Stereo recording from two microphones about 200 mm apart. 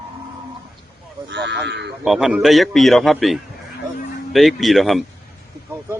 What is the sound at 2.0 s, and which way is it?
A man's voice, centre (ahead or behind).